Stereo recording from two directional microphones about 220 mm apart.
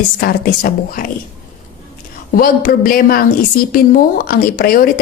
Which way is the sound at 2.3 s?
40° left (ahead or behind).